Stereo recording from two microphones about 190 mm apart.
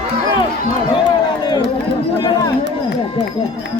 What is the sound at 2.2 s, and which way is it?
Chatter, 20° left (ahead or behind).